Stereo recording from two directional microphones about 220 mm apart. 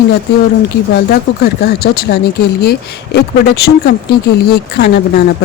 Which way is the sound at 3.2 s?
45° left (ahead or behind).